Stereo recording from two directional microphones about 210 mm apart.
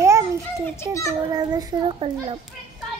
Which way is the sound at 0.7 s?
15° left (ahead or behind).